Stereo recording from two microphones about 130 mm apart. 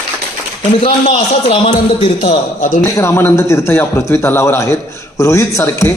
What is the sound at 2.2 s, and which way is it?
Speech, 65° left (ahead or behind).